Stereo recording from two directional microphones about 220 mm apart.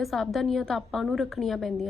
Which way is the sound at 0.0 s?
Centre (ahead or behind).